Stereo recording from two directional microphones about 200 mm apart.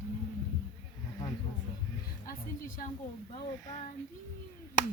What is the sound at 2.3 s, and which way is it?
Speech, 45° left (ahead or behind).